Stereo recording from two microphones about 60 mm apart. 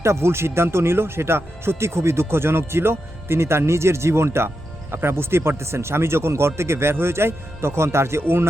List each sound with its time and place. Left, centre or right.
0.0 s speech: right